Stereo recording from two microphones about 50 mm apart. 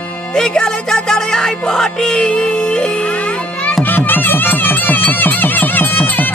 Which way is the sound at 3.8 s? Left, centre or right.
Left.